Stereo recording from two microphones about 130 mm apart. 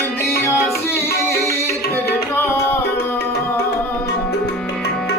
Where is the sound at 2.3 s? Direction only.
15° left (ahead or behind).